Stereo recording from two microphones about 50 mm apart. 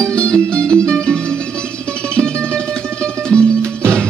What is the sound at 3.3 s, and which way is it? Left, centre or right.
Music, centre.